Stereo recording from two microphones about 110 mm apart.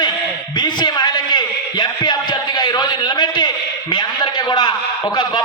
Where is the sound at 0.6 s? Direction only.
40° left (ahead or behind).